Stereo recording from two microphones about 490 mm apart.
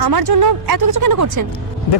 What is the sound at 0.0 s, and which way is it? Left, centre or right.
Speech, right.